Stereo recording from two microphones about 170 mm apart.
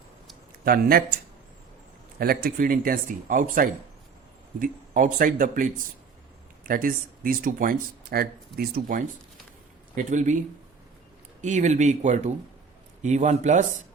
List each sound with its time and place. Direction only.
0.6 s speech: 60° right (ahead or behind)
2.1 s speech: 65° right (ahead or behind)
6.7 s speech: 55° right (ahead or behind)